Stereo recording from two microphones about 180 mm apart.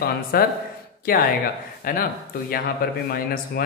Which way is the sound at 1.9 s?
50° left (ahead or behind).